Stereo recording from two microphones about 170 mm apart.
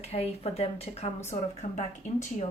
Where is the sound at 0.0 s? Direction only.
35° left (ahead or behind).